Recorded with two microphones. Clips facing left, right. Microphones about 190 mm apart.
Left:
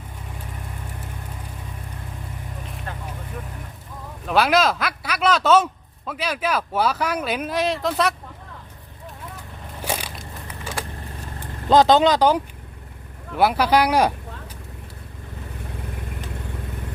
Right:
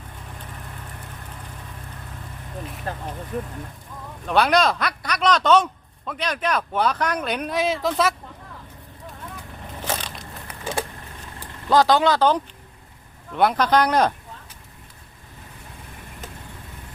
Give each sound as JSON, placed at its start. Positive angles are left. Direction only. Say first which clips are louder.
{"t": 2.9, "sound": "vehicle", "louder": "right 4 dB", "side_deg": -35}
{"t": 3.3, "sound": "speech", "louder": "right 9 dB", "side_deg": -30}
{"t": 4.3, "sound": "speech", "louder": "even", "side_deg": 5}
{"t": 9.8, "sound": "crushing", "louder": "left 1 dB", "side_deg": 10}
{"t": 10.6, "sound": "vehicle", "louder": "right 5 dB", "side_deg": -20}
{"t": 11.7, "sound": "speech", "louder": "left 3 dB", "side_deg": 20}